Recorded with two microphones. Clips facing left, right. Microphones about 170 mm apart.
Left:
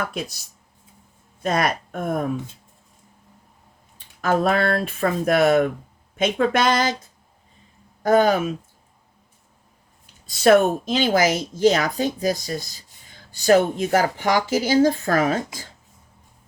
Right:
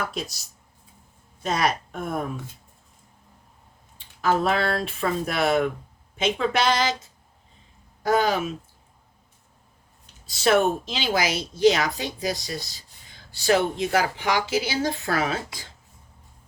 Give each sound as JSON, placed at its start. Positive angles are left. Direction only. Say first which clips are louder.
{"t": 0.0, "sound": "speech", "louder": "left 2 dB", "side_deg": 55}
{"t": 1.4, "sound": "speech", "louder": "left 2 dB", "side_deg": 50}
{"t": 4.2, "sound": "speech", "louder": "left 3 dB", "side_deg": 55}
{"t": 8.0, "sound": "speech", "louder": "left 5 dB", "side_deg": 50}
{"t": 10.4, "sound": "speech", "louder": "left 5 dB", "side_deg": 50}